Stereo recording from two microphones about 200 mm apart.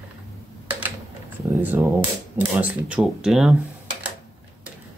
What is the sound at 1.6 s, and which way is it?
Speech, 10° right (ahead or behind).